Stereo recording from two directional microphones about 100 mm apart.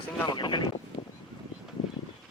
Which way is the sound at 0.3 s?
50° left (ahead or behind).